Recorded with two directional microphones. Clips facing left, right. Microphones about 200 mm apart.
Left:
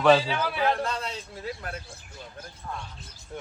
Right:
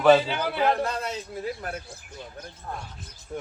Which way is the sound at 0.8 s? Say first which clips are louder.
Right 2 dB; 50° right (ahead or behind).